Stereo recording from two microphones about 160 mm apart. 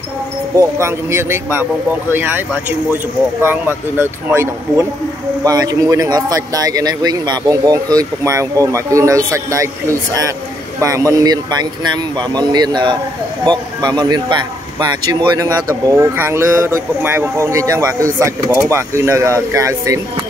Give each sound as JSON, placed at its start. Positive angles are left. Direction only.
{"t": 0.6, "sound": "speech", "side_deg": -15}
{"t": 3.4, "sound": "speech", "side_deg": -15}
{"t": 10.8, "sound": "speech", "side_deg": -20}